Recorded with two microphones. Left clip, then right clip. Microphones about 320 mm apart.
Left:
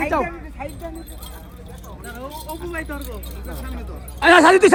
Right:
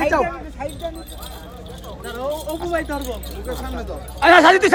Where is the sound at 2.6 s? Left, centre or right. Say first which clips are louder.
Right 7 dB; right.